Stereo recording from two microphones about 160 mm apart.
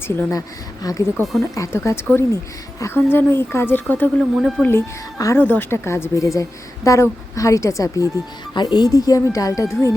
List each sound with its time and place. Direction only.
0.2 s speech: 20° left (ahead or behind)
1.1 s speech: centre (ahead or behind)
1.5 s a woman's voice: 20° left (ahead or behind)
4.2 s speech: centre (ahead or behind)
4.6 s a woman's voice: 15° left (ahead or behind)